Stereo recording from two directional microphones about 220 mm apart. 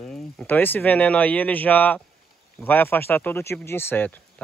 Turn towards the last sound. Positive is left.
turn(degrees=5)  # may be behind; listen again after turning